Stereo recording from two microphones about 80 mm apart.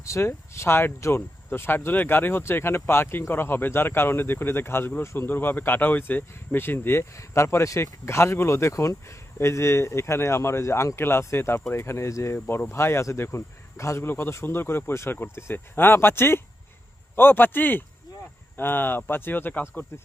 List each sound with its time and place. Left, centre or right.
0.0 s speech: left